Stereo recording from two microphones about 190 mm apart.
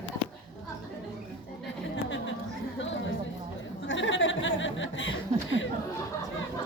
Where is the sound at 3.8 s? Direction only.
80° left.